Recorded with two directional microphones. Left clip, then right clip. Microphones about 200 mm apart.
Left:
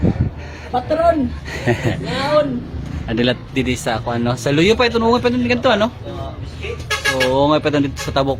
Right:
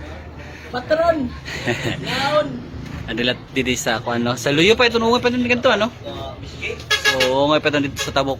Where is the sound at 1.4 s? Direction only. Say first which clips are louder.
Left 3 dB; 25° left (ahead or behind).